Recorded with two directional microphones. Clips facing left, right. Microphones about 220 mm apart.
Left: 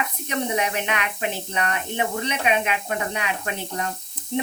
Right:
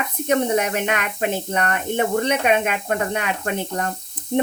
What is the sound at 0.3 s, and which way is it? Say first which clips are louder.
Speech: right 7 dB; 50° right (ahead or behind).